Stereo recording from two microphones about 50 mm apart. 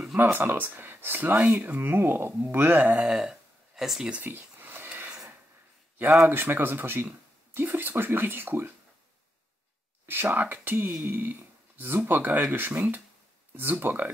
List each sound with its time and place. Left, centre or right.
0.2 s speech: right
1.8 s speech: right
2.8 s speech: right
3.1 s a sound: centre
4.2 s a sound: right
6.2 s speech: right
10.0 s speech: right